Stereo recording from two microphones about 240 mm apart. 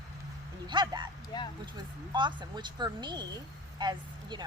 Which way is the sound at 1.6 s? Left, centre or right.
Centre.